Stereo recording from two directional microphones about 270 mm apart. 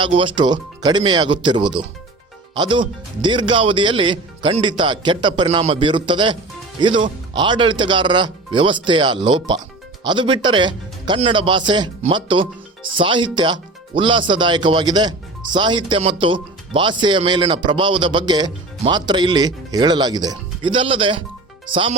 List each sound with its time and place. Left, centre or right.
0.0 s speech: centre